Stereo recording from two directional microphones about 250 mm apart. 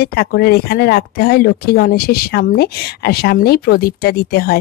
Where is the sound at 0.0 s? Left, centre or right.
Left.